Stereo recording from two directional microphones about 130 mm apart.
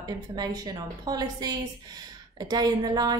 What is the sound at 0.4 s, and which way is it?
A woman's voice, 30° right (ahead or behind).